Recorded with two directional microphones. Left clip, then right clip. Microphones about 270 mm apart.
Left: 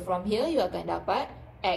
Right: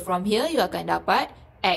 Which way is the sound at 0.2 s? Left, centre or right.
Right.